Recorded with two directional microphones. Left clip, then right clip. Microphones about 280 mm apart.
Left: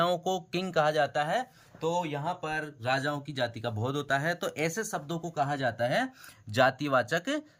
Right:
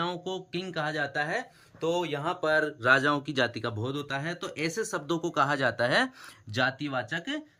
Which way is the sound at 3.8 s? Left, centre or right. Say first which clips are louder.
Left 7 dB; centre.